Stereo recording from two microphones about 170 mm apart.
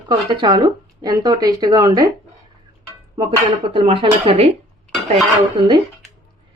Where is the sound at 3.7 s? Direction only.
30° right (ahead or behind).